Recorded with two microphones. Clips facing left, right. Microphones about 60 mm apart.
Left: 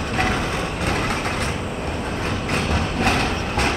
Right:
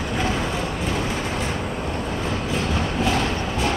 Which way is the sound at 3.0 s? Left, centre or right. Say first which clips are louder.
Left 2 dB; left.